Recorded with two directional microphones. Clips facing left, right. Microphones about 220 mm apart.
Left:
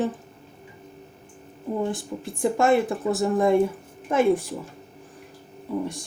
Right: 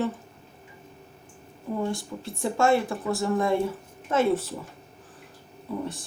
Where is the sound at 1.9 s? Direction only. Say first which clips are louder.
Left 2 dB; 20° left (ahead or behind).